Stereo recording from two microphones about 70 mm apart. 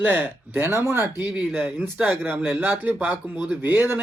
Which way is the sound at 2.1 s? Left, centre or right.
Right.